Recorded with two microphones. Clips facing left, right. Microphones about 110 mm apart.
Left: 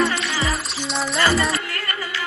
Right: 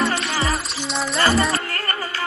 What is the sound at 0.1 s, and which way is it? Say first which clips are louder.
Music: right 2 dB; 30° right (ahead or behind).